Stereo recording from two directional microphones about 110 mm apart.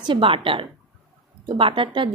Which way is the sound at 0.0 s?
50° right (ahead or behind).